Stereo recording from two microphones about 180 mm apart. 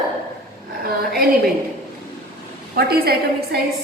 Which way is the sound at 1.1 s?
60° right (ahead or behind).